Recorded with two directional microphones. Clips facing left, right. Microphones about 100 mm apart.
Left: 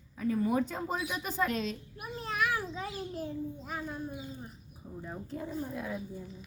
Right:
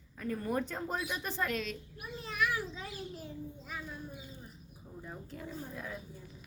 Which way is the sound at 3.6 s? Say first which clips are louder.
Left 5 dB; 40° left (ahead or behind).